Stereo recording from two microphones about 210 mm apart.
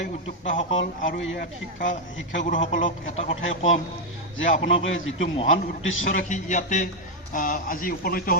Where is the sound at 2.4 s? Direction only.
35° left (ahead or behind).